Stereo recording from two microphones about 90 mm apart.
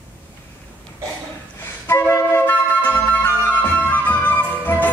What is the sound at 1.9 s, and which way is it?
Music, 30° left (ahead or behind).